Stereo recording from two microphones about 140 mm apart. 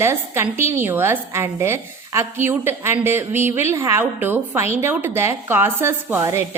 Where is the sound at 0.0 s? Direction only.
20° right (ahead or behind).